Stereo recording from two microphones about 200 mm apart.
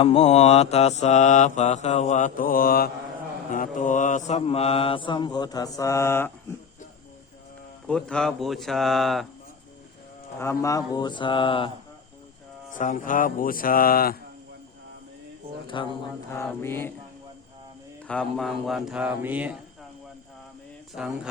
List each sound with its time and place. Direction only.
0.0 s mantra: 30° left (ahead or behind); by 6.3 s 10° left (ahead or behind)
7.9 s speech: 5° left (ahead or behind)
10.4 s mantra: 15° left (ahead or behind)
12.7 s music: 40° left (ahead or behind)
15.6 s speech: 25° left (ahead or behind)
16.3 s mantra: 15° left (ahead or behind)
18.1 s speech: 5° left (ahead or behind)
21.0 s speech: 5° right (ahead or behind)